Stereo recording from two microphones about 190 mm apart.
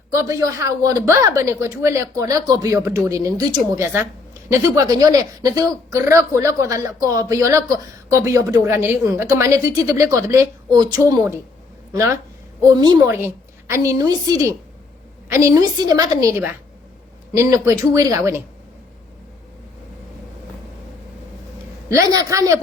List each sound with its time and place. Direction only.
0.2 s a woman's voice: 15° right (ahead or behind)
12.7 s a woman's voice: 20° right (ahead or behind)
21.8 s a woman's voice: 15° right (ahead or behind)